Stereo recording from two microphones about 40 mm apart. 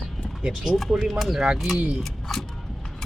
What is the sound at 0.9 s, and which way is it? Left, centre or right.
Speech, right.